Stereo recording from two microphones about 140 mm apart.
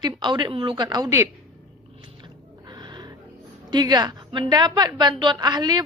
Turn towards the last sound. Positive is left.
turn(degrees=-30)  # may be behind; listen again after turning